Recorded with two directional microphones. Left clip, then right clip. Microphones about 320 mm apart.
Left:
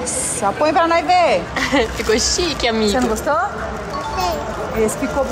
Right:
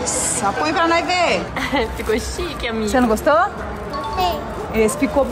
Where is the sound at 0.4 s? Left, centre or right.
Centre.